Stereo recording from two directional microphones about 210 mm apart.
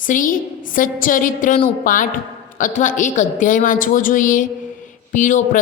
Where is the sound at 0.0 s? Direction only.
40° left (ahead or behind).